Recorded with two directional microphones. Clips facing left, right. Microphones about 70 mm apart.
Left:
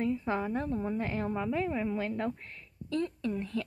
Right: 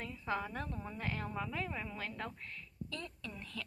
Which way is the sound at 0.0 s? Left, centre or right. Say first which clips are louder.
Left 8 dB; left.